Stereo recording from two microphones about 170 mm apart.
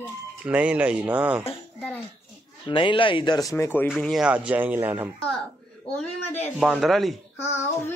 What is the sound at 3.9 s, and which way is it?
Speech, centre (ahead or behind).